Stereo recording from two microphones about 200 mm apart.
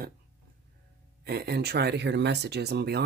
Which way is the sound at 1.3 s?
50° right (ahead or behind).